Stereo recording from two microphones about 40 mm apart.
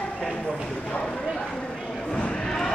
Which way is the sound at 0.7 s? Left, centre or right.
Left.